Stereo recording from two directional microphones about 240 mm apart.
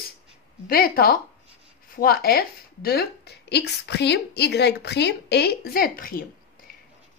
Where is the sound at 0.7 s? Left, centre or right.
Left.